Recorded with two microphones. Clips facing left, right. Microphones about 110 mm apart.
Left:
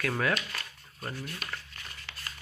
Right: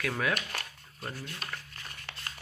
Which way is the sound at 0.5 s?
60° right (ahead or behind).